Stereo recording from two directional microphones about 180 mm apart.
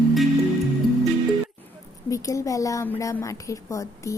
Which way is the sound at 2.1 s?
20° left (ahead or behind).